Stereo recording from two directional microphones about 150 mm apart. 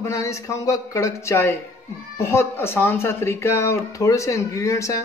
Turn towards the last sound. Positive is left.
turn(degrees=20)  # may be behind; listen again after turning